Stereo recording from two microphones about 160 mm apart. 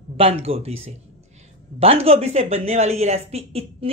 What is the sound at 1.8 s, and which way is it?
Speech, 40° right (ahead or behind).